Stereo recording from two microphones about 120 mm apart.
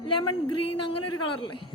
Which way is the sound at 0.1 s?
40° left (ahead or behind).